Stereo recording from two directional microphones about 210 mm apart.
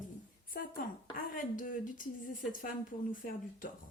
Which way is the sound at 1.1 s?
40° left (ahead or behind).